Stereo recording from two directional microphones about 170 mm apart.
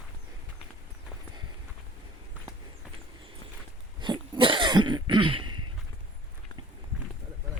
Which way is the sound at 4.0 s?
30° right (ahead or behind).